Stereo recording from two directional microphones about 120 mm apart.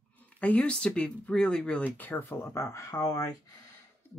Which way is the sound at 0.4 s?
10° left (ahead or behind).